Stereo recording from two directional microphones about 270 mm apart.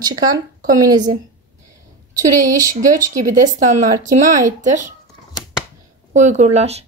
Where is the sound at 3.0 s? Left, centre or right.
Right.